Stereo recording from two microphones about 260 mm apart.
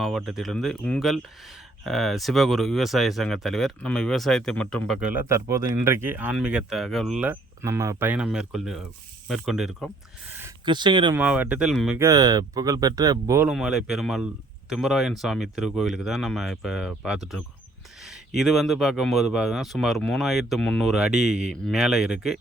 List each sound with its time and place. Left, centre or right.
0.0 s speech: centre
10.3 s speech: centre
11.2 s speech: centre